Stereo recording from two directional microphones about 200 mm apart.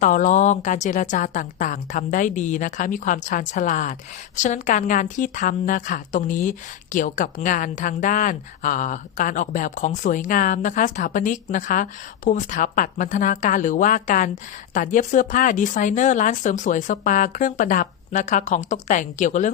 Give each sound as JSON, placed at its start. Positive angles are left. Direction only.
{"t": 0.0, "sound": "a woman's voice", "side_deg": 40}